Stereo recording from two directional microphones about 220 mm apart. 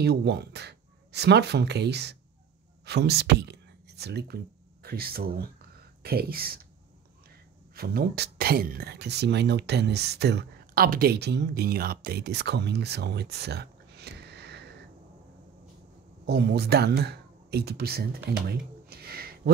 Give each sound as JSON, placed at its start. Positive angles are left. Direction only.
{"t": 0.0, "sound": "speech", "side_deg": -50}
{"t": 7.7, "sound": "speech", "side_deg": -45}
{"t": 16.3, "sound": "speech", "side_deg": -45}